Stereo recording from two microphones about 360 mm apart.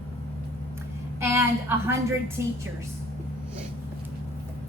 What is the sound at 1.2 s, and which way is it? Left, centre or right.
Speech, centre.